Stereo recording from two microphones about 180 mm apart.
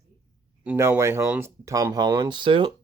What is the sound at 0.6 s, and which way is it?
Speech, 10° right (ahead or behind).